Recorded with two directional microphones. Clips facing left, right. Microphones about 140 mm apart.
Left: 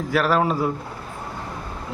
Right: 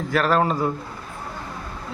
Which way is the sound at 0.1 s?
5° left (ahead or behind).